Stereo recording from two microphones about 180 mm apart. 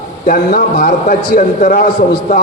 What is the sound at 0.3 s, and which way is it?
A man's voice, 60° left (ahead or behind).